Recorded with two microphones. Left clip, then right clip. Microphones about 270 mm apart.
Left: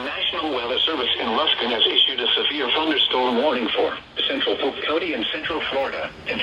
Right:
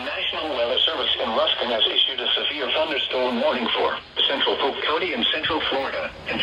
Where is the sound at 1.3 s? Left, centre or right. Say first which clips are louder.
Left 2 dB; left.